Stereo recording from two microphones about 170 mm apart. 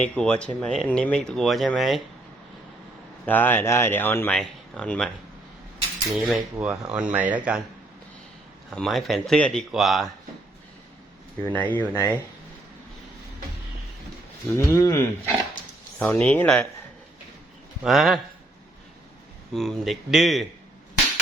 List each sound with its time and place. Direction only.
0.0 s speech: 5° left (ahead or behind)
3.2 s speech: 10° left (ahead or behind)
6.1 s speech: centre (ahead or behind)
8.7 s speech: centre (ahead or behind)
11.4 s speech: 10° left (ahead or behind)
14.5 s speech: 20° left (ahead or behind)
16.0 s speech: 5° left (ahead or behind)
17.8 s speech: centre (ahead or behind)
19.5 s speech: centre (ahead or behind)